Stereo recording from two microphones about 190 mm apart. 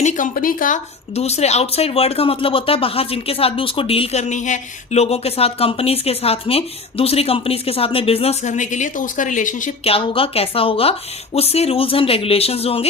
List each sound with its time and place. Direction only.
0.0 s speech: 40° left (ahead or behind)
9.9 s a woman's voice: 30° left (ahead or behind)